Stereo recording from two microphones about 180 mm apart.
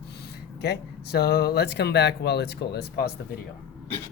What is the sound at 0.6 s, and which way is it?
Speech, 65° left (ahead or behind).